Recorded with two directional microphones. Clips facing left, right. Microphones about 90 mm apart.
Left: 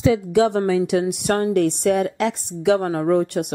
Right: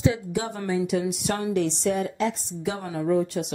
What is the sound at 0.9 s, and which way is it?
A woman's voice, 60° left (ahead or behind).